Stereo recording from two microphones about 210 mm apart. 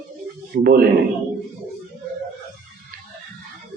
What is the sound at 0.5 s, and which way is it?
Speech, 45° right (ahead or behind).